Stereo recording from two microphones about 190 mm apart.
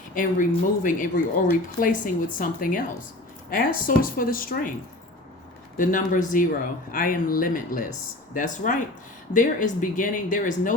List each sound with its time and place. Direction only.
0.1 s speech: 45° left (ahead or behind)
5.7 s speech: 45° left (ahead or behind)